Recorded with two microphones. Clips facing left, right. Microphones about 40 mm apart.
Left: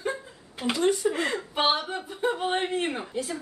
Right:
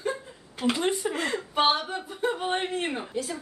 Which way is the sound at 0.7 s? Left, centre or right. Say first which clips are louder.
Left 3 dB; centre.